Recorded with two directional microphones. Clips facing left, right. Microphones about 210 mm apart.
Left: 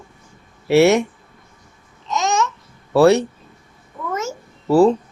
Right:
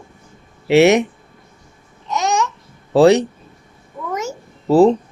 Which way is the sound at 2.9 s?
15° right (ahead or behind).